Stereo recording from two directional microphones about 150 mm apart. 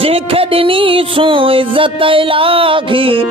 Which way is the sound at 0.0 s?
40° right (ahead or behind).